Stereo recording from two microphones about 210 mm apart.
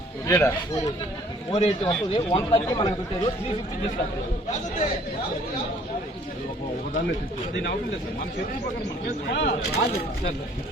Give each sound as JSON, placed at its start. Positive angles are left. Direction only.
{"t": 0.3, "sound": "speech", "side_deg": 15}
{"t": 1.5, "sound": "a man's voice", "side_deg": 25}
{"t": 9.3, "sound": "speech", "side_deg": 55}